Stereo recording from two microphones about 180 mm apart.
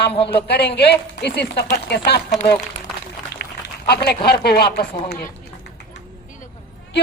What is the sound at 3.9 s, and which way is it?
A man's voice, 65° left (ahead or behind).